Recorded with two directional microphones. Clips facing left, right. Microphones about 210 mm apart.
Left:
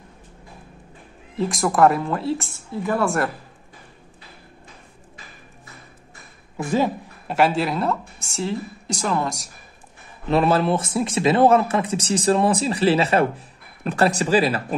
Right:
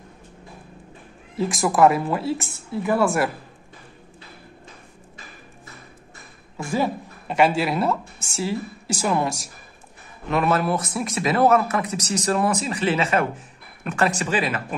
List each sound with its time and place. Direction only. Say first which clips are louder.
1.3 s speech: even; centre (ahead or behind)
6.5 s a sound: left 3 dB; 15° left (ahead or behind)
7.2 s speech: even; centre (ahead or behind)
10.3 s a man's voice: left 3 dB; 30° left (ahead or behind)